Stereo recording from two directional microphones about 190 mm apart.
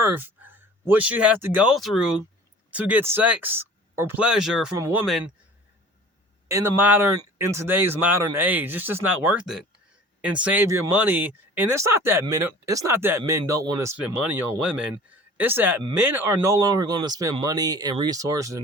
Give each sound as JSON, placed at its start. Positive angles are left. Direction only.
{"t": 0.0, "sound": "speech", "side_deg": -10}
{"t": 6.5, "sound": "speech", "side_deg": -15}